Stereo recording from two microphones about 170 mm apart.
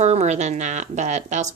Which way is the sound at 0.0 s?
40° right (ahead or behind).